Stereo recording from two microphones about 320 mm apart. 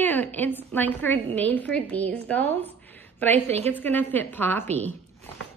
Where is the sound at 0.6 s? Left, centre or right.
Centre.